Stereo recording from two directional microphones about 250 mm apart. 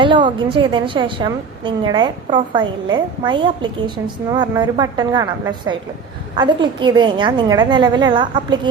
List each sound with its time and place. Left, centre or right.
0.0 s a woman's voice: centre